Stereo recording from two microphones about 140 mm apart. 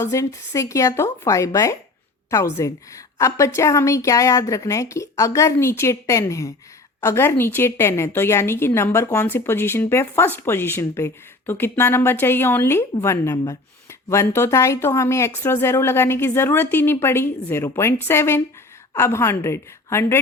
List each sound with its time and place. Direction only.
0.0 s a woman's voice: 20° left (ahead or behind)